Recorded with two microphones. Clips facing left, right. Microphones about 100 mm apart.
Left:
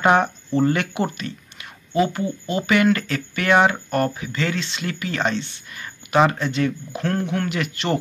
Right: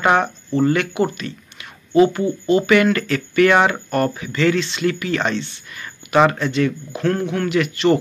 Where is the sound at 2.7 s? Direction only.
20° left (ahead or behind).